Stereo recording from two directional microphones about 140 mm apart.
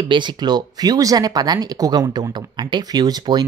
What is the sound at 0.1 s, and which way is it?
Speech, 35° right (ahead or behind).